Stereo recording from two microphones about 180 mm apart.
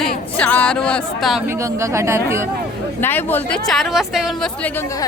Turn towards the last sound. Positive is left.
turn(degrees=0)  # may be behind; listen again after turning